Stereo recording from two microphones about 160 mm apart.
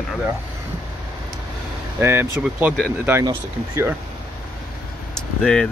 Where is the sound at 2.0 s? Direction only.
15° right (ahead or behind).